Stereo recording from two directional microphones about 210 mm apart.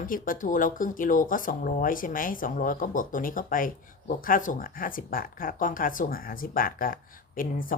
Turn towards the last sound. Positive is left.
turn(degrees=40)  # may be behind; listen again after turning